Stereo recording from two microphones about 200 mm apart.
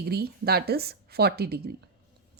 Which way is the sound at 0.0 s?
50° right (ahead or behind).